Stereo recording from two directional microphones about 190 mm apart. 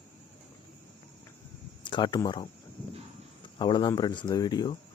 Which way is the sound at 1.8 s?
25° left (ahead or behind).